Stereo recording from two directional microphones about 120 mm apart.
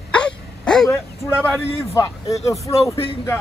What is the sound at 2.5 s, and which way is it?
Speech, 25° left (ahead or behind).